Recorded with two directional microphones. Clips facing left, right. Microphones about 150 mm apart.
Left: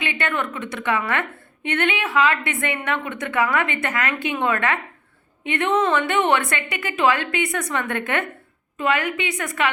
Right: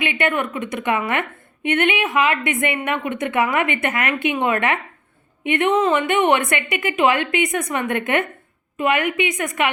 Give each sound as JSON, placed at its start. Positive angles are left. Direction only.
{"t": 0.0, "sound": "a woman's voice", "side_deg": -20}